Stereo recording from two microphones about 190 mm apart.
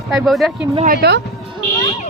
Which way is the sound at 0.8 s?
55° right (ahead or behind).